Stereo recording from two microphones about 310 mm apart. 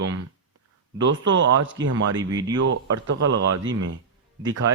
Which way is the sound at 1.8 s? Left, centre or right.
Right.